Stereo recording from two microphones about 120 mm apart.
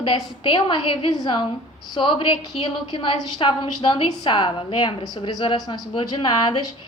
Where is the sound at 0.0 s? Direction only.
40° left (ahead or behind).